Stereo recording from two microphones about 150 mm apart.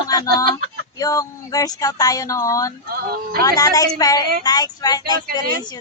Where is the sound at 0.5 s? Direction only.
25° left (ahead or behind).